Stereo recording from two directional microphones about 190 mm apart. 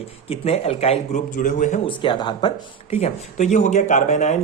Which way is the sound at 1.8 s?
25° left (ahead or behind).